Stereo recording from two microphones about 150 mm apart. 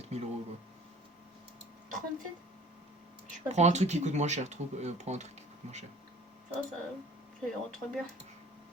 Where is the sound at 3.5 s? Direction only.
50° right (ahead or behind).